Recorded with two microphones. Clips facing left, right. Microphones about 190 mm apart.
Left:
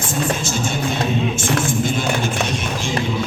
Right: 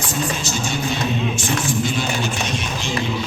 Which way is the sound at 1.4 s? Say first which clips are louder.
Left 2 dB; 50° left (ahead or behind).